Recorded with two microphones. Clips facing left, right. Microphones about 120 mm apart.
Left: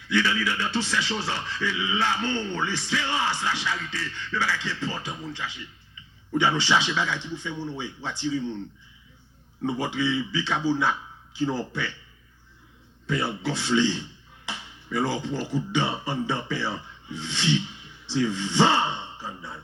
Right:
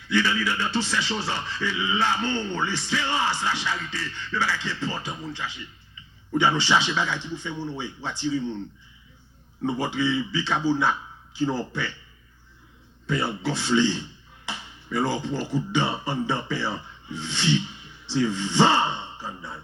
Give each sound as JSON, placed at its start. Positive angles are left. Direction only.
{"t": 0.1, "sound": "speech", "side_deg": -35}
{"t": 9.6, "sound": "speech", "side_deg": -35}
{"t": 13.1, "sound": "speech", "side_deg": -35}